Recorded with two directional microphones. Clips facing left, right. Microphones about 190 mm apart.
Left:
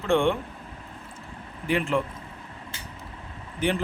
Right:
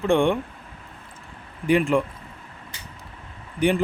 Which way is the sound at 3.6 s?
15° right (ahead or behind).